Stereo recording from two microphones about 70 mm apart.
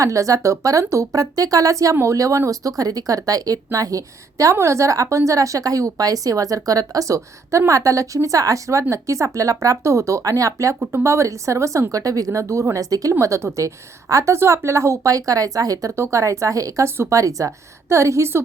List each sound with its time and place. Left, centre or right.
0.0 s speech: right
16.0 s speech: right